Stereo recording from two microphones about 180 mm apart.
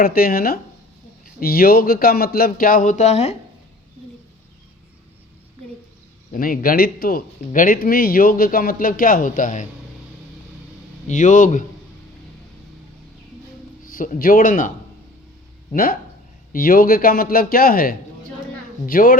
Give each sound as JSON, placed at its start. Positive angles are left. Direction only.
{"t": 0.0, "sound": "speech", "side_deg": 55}
{"t": 6.3, "sound": "speech", "side_deg": 50}
{"t": 11.1, "sound": "speech", "side_deg": 45}
{"t": 13.8, "sound": "speech", "side_deg": 50}
{"t": 15.7, "sound": "speech", "side_deg": 50}